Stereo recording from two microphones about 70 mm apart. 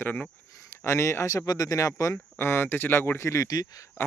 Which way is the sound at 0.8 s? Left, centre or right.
Left.